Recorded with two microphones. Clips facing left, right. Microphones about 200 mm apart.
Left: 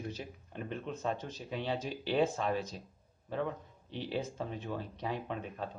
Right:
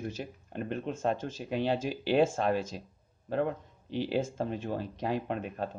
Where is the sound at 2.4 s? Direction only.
90° right.